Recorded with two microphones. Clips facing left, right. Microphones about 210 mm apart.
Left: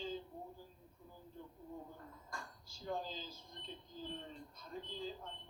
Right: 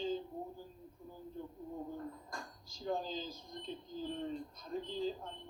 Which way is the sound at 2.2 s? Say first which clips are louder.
Right 3 dB; 40° right (ahead or behind).